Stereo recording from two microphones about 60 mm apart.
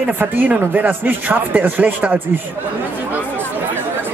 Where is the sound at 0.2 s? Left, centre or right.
Right.